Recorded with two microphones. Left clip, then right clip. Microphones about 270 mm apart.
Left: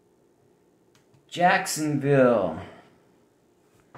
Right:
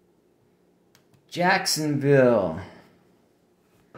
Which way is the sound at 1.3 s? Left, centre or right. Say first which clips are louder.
Left 1 dB; right.